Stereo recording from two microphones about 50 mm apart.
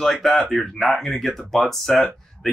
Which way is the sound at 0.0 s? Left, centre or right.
Centre.